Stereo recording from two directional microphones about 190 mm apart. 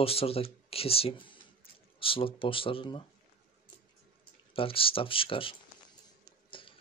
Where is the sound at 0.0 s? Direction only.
30° left (ahead or behind).